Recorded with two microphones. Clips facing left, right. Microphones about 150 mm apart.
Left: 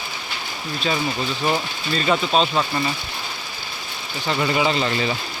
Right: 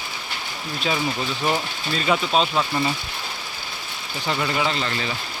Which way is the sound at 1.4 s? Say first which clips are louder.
Left 1 dB; centre (ahead or behind).